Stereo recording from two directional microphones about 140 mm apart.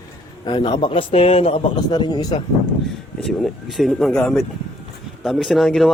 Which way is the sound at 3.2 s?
Centre (ahead or behind).